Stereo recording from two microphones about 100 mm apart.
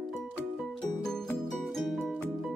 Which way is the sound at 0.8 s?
5° left (ahead or behind).